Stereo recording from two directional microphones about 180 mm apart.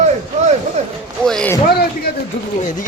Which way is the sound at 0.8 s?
40° right (ahead or behind).